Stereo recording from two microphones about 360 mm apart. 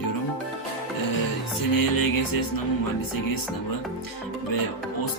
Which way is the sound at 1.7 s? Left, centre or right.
Left.